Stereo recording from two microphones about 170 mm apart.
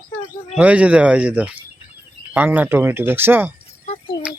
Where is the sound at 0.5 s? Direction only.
10° right (ahead or behind).